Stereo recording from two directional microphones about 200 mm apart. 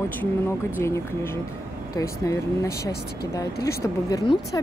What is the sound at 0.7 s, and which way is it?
A woman's voice, 10° left (ahead or behind).